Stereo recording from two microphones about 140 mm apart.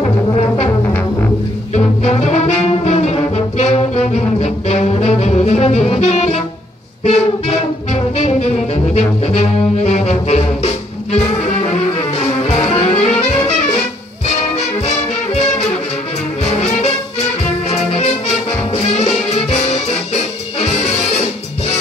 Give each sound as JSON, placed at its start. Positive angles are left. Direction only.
{"t": 2.0, "sound": "brass instrument", "side_deg": 50}
{"t": 7.1, "sound": "music", "side_deg": 50}
{"t": 12.4, "sound": "music", "side_deg": 50}
{"t": 16.5, "sound": "music", "side_deg": 50}